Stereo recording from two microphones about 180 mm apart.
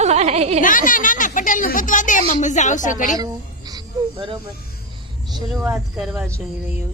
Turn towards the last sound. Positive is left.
turn(degrees=-5)  # may be behind; listen again after turning